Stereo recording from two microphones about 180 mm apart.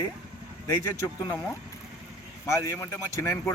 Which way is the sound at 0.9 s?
15° left (ahead or behind).